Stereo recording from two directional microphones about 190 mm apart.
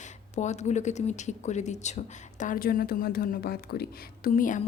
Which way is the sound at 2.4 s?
45° left (ahead or behind).